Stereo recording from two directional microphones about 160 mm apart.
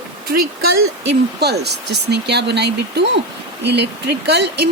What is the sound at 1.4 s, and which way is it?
Speech, 90° right.